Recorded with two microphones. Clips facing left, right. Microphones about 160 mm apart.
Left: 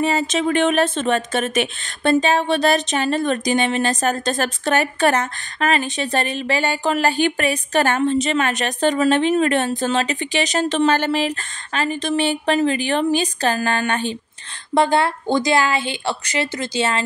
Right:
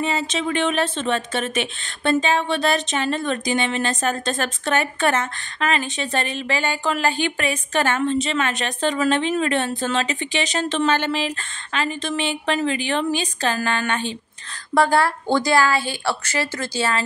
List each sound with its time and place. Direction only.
0.0 s speech: 45° left (ahead or behind)
14.7 s a woman's voice: 20° left (ahead or behind)